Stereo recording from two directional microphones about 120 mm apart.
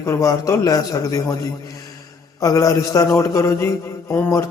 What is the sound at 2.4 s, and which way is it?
Speech, 30° left (ahead or behind).